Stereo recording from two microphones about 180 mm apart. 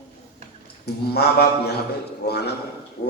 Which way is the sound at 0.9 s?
65° left (ahead or behind).